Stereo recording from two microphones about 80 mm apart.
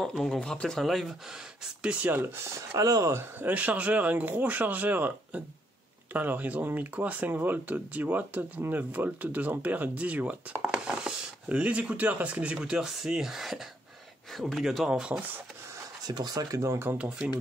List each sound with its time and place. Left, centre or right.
0.0 s speech: centre
1.8 s speech: centre
2.1 s speech: right
2.8 s speech: right
3.1 s speech: right
3.4 s speech: centre
15.1 s speech: right
16.1 s speech: right